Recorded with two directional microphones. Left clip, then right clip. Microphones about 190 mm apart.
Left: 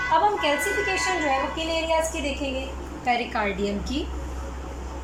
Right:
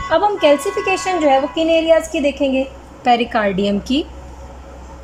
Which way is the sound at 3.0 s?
45° right (ahead or behind).